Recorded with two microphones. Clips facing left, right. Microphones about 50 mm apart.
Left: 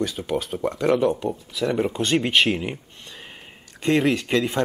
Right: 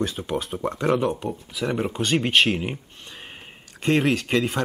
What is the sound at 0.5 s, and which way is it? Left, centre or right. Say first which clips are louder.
Speech: left 2 dB; centre.